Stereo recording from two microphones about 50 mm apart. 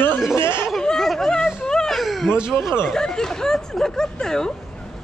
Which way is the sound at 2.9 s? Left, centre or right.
Centre.